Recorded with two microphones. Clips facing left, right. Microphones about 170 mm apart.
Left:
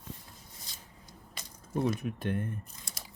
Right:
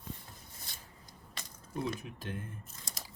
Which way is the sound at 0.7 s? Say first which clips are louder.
Even; 60° right (ahead or behind).